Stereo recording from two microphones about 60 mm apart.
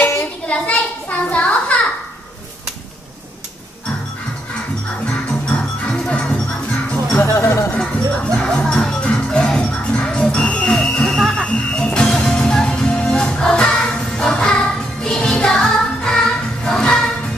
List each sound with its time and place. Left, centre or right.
0.0 s a sound: left
0.5 s children playing: left
5.0 s music: left
7.2 s music: left
7.9 s music: centre